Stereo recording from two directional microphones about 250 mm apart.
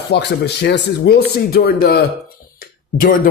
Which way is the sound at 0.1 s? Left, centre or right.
Left.